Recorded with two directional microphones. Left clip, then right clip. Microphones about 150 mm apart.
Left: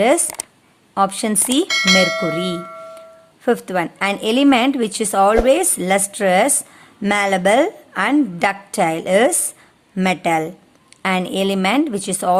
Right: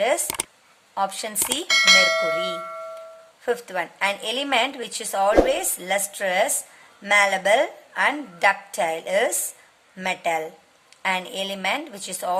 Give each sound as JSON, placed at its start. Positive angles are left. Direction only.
{"t": 0.9, "sound": "a woman's voice", "side_deg": 40}
{"t": 1.6, "sound": "speech", "side_deg": 0}
{"t": 3.4, "sound": "a woman's voice", "side_deg": 45}